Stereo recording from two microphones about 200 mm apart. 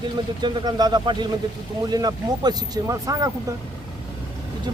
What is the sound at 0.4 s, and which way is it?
A man's voice, 20° right (ahead or behind).